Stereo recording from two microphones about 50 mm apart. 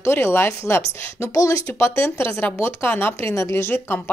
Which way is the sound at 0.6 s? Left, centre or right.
Left.